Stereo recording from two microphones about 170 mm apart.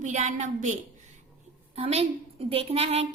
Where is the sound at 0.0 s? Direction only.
45° right (ahead or behind).